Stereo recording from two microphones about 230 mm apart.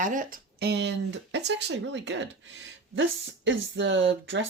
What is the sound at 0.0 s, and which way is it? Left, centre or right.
Speech, right.